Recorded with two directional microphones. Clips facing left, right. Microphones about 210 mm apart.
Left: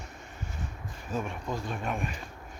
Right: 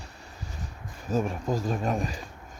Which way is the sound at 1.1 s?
40° right (ahead or behind).